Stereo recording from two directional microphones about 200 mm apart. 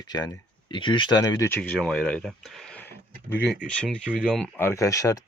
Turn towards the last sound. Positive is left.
turn(degrees=15)  # may be behind; listen again after turning